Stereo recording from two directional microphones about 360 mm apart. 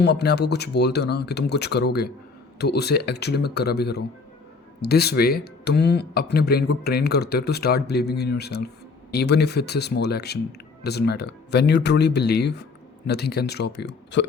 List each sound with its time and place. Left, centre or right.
0.0 s speech: left